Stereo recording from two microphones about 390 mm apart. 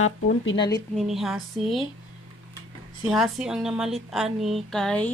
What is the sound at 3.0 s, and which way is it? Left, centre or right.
A woman's voice, centre.